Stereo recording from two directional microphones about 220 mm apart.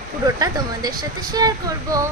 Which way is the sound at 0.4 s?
15° right (ahead or behind).